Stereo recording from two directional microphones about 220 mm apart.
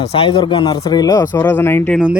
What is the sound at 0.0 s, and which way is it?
Speech, 25° left (ahead or behind).